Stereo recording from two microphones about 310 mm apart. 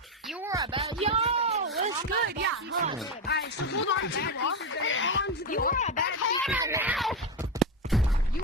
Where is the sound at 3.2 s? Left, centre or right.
Left.